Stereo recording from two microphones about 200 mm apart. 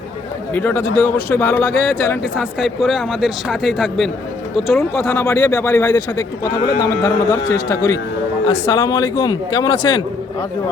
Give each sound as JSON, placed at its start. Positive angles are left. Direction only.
{"t": 0.5, "sound": "speech", "side_deg": 10}
{"t": 2.3, "sound": "speech", "side_deg": -5}
{"t": 5.0, "sound": "a man's voice", "side_deg": 15}